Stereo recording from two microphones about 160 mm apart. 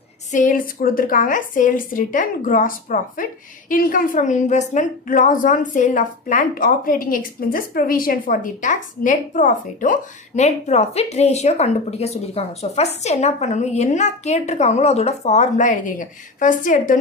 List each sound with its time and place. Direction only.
0.3 s a woman's voice: 55° left (ahead or behind)